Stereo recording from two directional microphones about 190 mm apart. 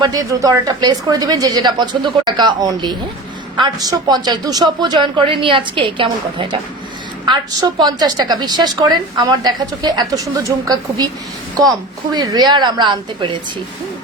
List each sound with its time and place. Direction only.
0.0 s speech: 20° right (ahead or behind)